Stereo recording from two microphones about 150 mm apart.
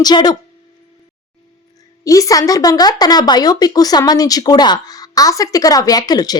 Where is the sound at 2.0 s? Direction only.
20° left (ahead or behind).